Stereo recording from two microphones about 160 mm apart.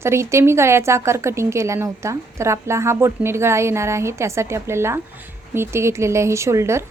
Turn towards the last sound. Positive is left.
turn(degrees=-15)  # may be behind; listen again after turning